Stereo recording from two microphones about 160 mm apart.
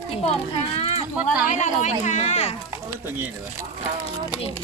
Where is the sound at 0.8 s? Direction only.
40° left (ahead or behind).